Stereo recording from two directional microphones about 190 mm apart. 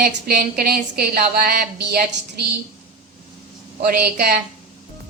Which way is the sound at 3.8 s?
50° right (ahead or behind).